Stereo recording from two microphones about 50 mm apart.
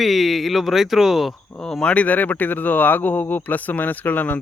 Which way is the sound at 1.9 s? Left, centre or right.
Left.